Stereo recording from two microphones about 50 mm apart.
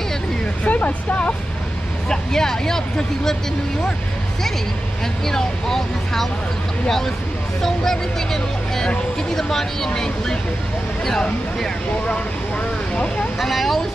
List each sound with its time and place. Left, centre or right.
0.7 s speech: left
2.0 s speech: centre
5.2 s speech: centre
7.6 s speech: centre
13.4 s speech: centre